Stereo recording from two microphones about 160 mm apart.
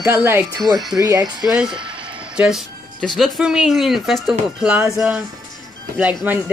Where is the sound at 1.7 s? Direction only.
30° right (ahead or behind).